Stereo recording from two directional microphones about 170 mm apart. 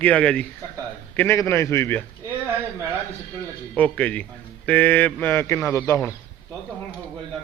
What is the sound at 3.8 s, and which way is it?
A man's voice, 10° left (ahead or behind).